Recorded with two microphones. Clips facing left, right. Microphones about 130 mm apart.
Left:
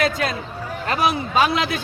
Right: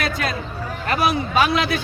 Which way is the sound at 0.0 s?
25° left (ahead or behind).